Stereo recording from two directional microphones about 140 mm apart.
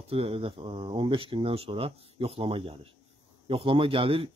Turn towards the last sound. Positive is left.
turn(degrees=-40)  # may be behind; listen again after turning